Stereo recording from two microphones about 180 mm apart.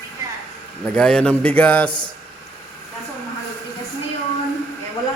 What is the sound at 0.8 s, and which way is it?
A man's voice, 5° left (ahead or behind).